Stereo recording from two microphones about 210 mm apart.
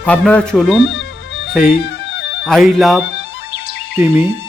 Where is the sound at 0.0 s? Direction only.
5° left (ahead or behind).